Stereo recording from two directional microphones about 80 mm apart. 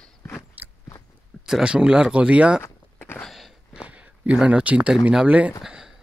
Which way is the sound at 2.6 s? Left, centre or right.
Left.